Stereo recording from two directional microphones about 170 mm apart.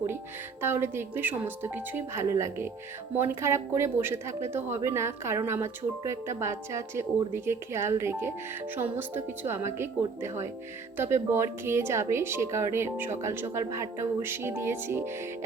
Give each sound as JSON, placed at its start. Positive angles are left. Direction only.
{"t": 0.6, "sound": "a woman's voice", "side_deg": -15}